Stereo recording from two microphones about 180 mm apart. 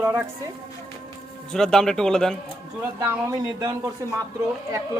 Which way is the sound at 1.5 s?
5° left (ahead or behind).